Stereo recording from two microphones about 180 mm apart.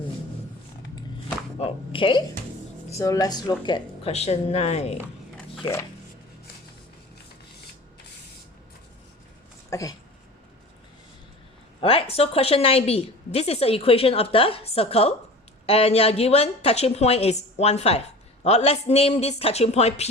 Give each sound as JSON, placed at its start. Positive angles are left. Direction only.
{"t": 1.5, "sound": "a sound", "side_deg": 30}
{"t": 2.9, "sound": "speech", "side_deg": 15}
{"t": 3.7, "sound": "a woman's voice", "side_deg": 35}
{"t": 9.6, "sound": "speech", "side_deg": 15}
{"t": 11.8, "sound": "a woman's voice", "side_deg": 30}